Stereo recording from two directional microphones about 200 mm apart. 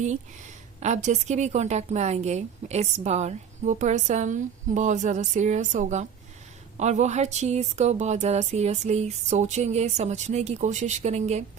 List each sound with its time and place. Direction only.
0.0 s a woman's voice: 35° right (ahead or behind)